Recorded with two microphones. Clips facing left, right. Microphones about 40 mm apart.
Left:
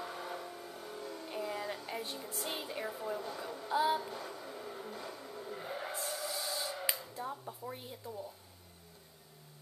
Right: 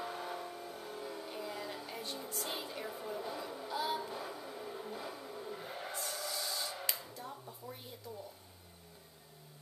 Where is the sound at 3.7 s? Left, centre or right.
Centre.